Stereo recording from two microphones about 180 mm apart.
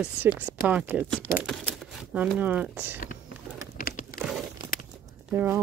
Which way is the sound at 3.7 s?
50° left (ahead or behind).